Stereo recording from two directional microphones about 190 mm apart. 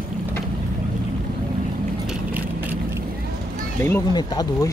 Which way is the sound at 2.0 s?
10° right (ahead or behind).